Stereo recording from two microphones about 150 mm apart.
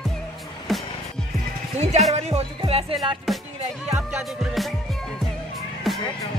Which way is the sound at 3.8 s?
5° right (ahead or behind).